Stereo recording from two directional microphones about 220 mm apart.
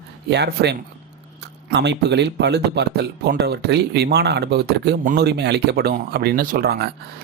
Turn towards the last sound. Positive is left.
turn(degrees=-45)  # may be behind; listen again after turning